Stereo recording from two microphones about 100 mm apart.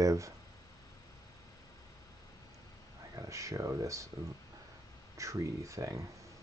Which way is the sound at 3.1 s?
30° right (ahead or behind).